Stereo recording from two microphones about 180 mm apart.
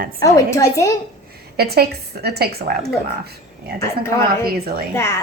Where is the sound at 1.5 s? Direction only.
60° right (ahead or behind).